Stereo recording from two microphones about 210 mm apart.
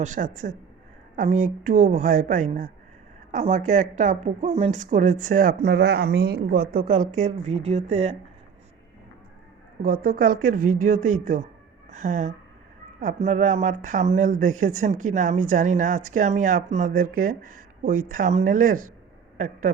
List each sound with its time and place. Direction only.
0.0 s speech: 35° right (ahead or behind)
7.2 s speech: 30° right (ahead or behind)
9.8 s speech: 45° right (ahead or behind)